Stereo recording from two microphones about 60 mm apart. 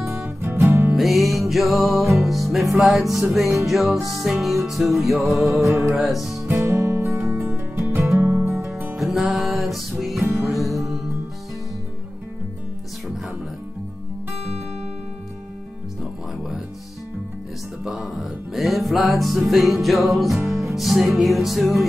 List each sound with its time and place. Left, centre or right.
0.4 s music: right
0.9 s music: centre
6.4 s music: right
8.5 s music: centre
10.1 s music: right
10.4 s music: centre
17.8 s music: centre